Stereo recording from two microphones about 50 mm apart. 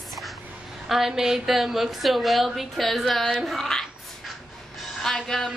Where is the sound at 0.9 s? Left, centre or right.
Centre.